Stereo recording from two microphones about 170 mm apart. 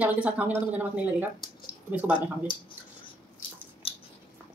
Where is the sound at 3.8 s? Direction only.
35° left (ahead or behind).